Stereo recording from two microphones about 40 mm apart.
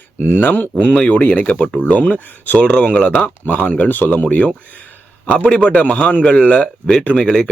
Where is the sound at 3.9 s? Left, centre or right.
Left.